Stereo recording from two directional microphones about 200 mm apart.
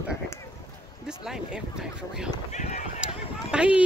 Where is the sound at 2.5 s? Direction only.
35° left (ahead or behind).